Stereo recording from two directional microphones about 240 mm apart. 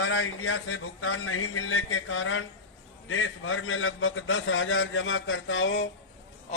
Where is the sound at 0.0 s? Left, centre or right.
Left.